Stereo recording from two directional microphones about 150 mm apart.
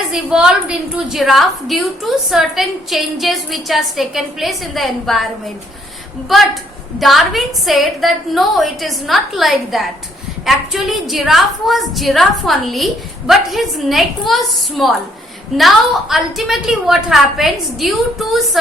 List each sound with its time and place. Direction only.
0.1 s a woman's voice: 5° right (ahead or behind)